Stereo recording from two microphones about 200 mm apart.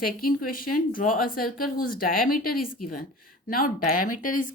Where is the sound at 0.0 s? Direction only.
45° left (ahead or behind).